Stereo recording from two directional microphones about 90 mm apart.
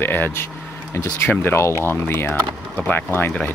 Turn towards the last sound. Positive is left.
turn(degrees=25)  # may be behind; listen again after turning